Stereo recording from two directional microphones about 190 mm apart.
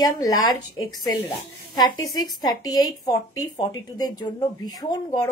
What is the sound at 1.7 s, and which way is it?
A woman's voice, 20° left (ahead or behind).